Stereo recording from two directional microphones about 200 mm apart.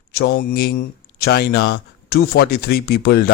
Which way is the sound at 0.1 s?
55° left (ahead or behind).